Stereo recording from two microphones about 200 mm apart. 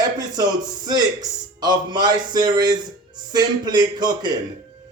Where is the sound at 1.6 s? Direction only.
20° right (ahead or behind).